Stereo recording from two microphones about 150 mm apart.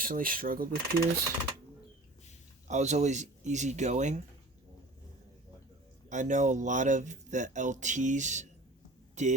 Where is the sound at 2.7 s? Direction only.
50° right (ahead or behind).